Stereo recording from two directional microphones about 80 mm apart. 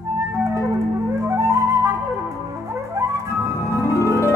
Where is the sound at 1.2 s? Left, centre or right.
Right.